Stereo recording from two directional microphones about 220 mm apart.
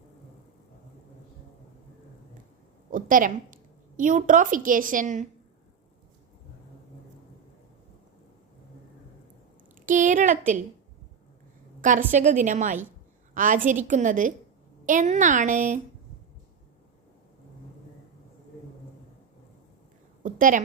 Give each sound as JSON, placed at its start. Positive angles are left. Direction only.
{"t": 2.9, "sound": "a woman's voice", "side_deg": -40}
{"t": 9.8, "sound": "a woman's voice", "side_deg": -35}
{"t": 11.8, "sound": "a woman's voice", "side_deg": -35}
{"t": 20.2, "sound": "a sound", "side_deg": -35}